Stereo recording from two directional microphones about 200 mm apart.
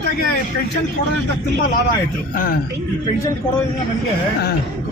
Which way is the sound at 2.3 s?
45° left (ahead or behind).